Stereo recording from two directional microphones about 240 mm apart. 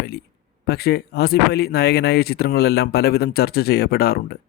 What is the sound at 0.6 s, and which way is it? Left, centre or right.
Speech, left.